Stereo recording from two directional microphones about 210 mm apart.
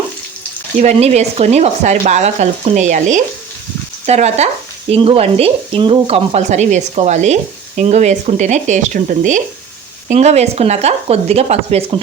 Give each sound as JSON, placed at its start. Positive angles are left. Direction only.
{"t": 0.8, "sound": "speech", "side_deg": -30}